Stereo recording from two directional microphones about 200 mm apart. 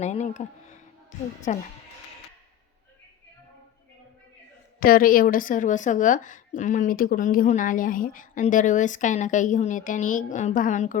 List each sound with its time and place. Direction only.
0.0 s a woman's voice: 35° left (ahead or behind)
1.5 s a woman's voice: 40° left (ahead or behind)
4.8 s a woman's voice: 45° left (ahead or behind)